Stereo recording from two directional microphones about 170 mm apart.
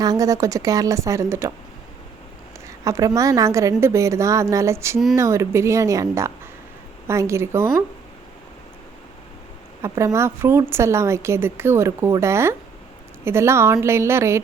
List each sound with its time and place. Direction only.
0.0 s a woman's voice: 20° right (ahead or behind)
2.6 s a sound: 20° right (ahead or behind)
3.2 s a woman's voice: 20° right (ahead or behind)
9.8 s a woman's voice: 15° right (ahead or behind)